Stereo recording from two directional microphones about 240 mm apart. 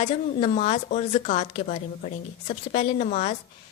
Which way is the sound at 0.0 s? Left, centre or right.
Left.